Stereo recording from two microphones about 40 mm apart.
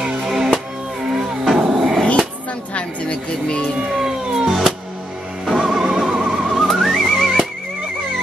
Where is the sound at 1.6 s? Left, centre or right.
Centre.